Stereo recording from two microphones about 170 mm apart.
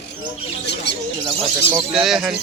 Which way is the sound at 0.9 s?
90° left.